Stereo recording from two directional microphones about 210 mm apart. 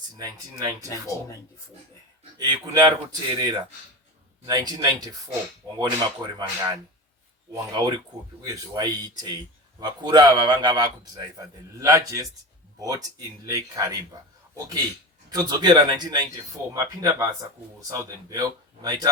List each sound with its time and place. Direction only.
0.2 s speech: 15° right (ahead or behind)
0.9 s speech: 15° left (ahead or behind)
2.4 s a man's voice: 20° right (ahead or behind)
15.3 s a man's voice: 20° right (ahead or behind)